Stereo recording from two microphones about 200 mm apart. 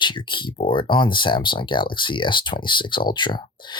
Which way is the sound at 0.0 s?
25° left (ahead or behind).